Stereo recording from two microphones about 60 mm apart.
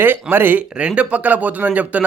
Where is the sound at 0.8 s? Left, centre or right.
Centre.